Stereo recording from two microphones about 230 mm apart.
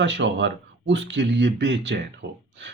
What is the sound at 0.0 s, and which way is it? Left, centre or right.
Speech, right.